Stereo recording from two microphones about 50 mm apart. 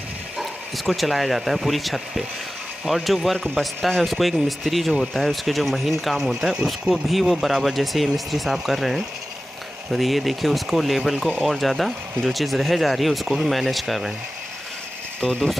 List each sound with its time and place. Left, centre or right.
0.4 s speech: centre
6.5 s speech: centre
7.1 s speech: centre
15.1 s speech: left